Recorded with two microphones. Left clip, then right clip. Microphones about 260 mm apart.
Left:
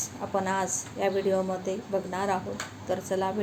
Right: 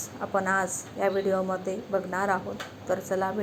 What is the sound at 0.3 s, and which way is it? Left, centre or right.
A woman's voice, centre.